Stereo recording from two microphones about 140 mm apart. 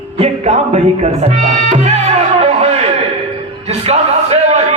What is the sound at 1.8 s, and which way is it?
Music, 50° right (ahead or behind).